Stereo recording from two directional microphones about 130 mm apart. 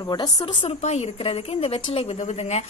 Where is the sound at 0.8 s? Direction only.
55° left (ahead or behind).